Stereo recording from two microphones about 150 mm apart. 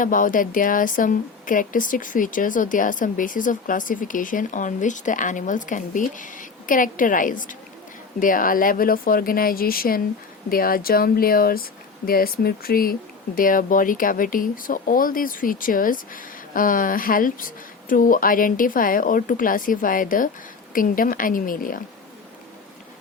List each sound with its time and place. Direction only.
0.0 s speech: 65° left (ahead or behind)